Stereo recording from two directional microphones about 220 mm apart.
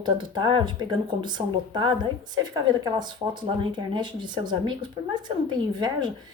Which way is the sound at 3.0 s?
20° right (ahead or behind).